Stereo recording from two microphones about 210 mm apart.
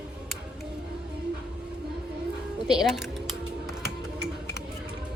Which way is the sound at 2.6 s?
Centre (ahead or behind).